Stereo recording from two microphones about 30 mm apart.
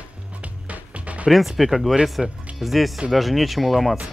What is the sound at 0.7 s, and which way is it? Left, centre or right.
Music, right.